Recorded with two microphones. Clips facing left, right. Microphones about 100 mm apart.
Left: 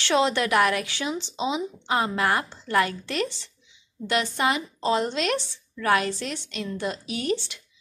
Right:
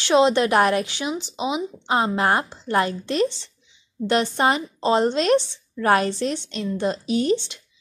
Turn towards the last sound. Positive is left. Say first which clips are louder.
# right 6 dB
turn(degrees=-25)  # may be behind; listen again after turning